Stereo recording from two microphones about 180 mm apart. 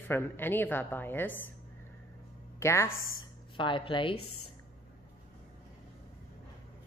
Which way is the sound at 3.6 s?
25° left (ahead or behind).